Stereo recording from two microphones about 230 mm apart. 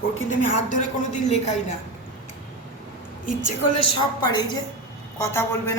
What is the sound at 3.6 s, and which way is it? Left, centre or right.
Speech, left.